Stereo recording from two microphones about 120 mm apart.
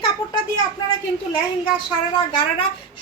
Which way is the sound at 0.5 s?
35° left (ahead or behind).